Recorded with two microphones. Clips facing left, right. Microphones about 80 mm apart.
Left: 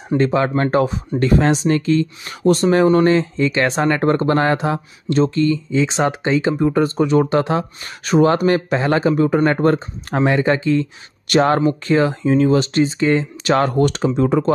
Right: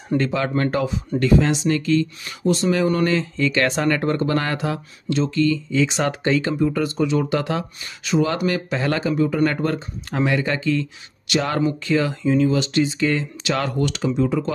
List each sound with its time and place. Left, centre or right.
0.2 s speech: left
1.8 s speech: left
2.4 s speech: left
4.0 s speech: left
6.6 s speech: left
7.8 s speech: left
8.3 s speech: left
9.1 s speech: left
11.2 s speech: left
13.4 s speech: left